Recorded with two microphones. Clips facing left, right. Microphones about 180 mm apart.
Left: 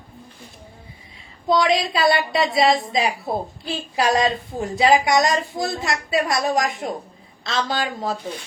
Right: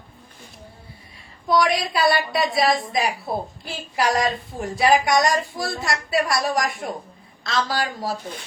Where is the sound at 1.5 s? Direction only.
20° left (ahead or behind).